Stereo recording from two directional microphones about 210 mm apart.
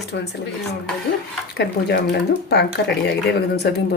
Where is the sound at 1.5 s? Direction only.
50° left (ahead or behind).